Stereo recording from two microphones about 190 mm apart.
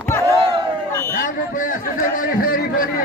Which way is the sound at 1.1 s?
45° left (ahead or behind).